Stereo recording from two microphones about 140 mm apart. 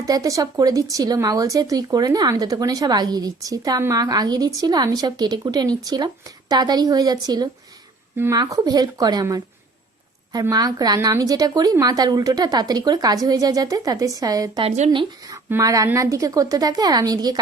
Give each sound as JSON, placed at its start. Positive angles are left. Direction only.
{"t": 0.0, "sound": "speech", "side_deg": -25}
{"t": 8.1, "sound": "speech", "side_deg": -15}
{"t": 10.5, "sound": "speech", "side_deg": -25}